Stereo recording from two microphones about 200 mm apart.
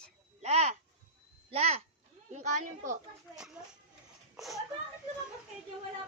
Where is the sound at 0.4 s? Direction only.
35° right (ahead or behind).